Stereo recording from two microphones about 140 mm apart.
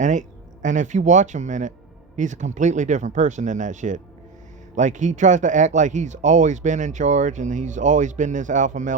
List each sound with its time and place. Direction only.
0.0 s speech: 60° right (ahead or behind)